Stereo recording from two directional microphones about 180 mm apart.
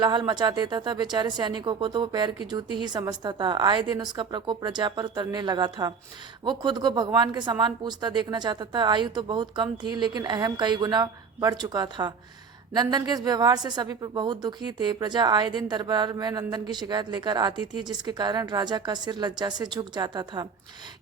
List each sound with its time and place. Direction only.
0.0 s speech: 25° right (ahead or behind)